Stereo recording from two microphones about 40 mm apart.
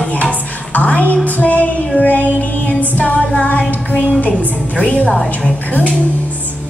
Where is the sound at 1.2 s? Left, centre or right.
Left.